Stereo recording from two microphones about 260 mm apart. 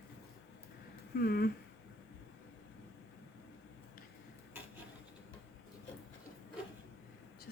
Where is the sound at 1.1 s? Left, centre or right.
Left.